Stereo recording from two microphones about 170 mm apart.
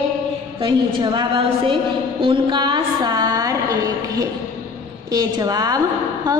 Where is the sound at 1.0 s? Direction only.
30° right (ahead or behind).